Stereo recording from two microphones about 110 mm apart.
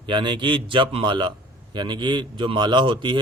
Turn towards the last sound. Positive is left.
turn(degrees=-45)  # may be behind; listen again after turning